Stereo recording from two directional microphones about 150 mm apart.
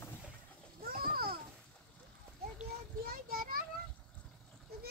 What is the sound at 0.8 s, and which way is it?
Children playing, 85° right.